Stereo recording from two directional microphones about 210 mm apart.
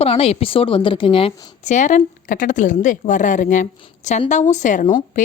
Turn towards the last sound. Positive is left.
turn(degrees=35)  # may be behind; listen again after turning